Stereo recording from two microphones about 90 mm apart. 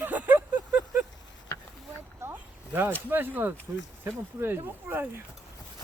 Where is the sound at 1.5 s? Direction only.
35° left (ahead or behind).